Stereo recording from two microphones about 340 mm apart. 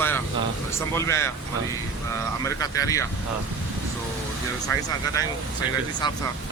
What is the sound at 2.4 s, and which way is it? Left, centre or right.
Speech, centre.